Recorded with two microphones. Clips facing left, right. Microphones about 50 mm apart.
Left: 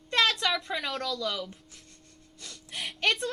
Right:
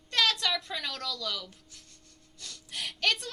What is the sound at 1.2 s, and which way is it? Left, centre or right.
Speech, left.